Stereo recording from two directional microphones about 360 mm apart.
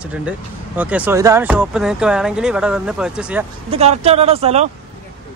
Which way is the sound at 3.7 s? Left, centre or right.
Centre.